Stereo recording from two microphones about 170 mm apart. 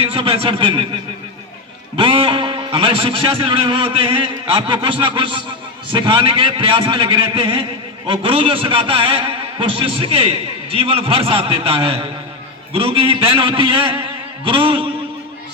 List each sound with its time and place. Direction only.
0.0 s a man's voice: 35° right (ahead or behind)
2.0 s a man's voice: 30° right (ahead or behind)